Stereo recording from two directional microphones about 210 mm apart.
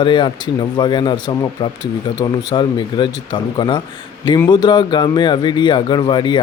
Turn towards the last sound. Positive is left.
turn(degrees=20)  # may be behind; listen again after turning